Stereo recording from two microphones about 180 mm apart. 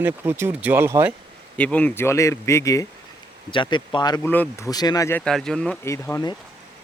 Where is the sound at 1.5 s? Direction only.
5° left (ahead or behind); by 4.2 s 25° left (ahead or behind).